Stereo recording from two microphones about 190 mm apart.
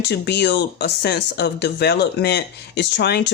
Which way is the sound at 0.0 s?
60° left (ahead or behind).